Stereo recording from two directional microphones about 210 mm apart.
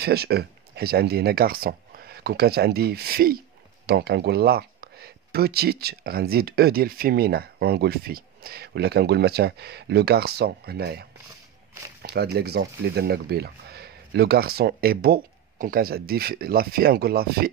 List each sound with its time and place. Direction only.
0.0 s speech: 50° right (ahead or behind)